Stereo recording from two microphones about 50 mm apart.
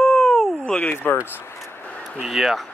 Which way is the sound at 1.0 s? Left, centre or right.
Left.